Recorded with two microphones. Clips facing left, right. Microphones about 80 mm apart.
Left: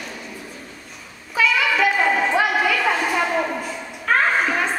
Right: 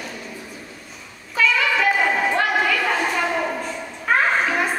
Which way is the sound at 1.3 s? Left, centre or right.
Centre.